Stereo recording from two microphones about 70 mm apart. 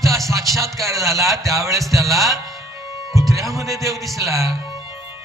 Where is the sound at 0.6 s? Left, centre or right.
Right.